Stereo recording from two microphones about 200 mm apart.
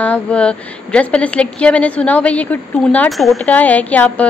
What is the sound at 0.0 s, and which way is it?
A woman's voice, 5° left (ahead or behind).